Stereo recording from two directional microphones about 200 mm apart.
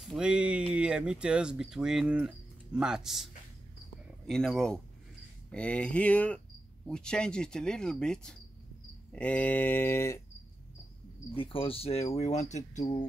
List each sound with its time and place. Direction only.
0.0 s speech: centre (ahead or behind)
4.3 s speech: centre (ahead or behind)
5.5 s a sound: 5° left (ahead or behind)
6.9 s speech: 5° left (ahead or behind)
9.1 s a sound: 5° left (ahead or behind)
11.3 s speech: 25° left (ahead or behind)